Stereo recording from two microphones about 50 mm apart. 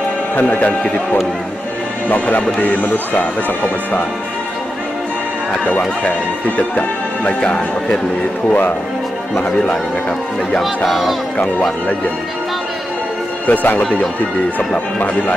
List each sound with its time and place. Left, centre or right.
0.4 s speech: left
2.0 s speech: left
6.0 s speech: left
8.5 s speech: left
10.9 s speech: centre
13.5 s speech: left